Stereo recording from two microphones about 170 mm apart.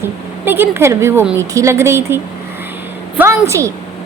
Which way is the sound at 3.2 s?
15° right (ahead or behind).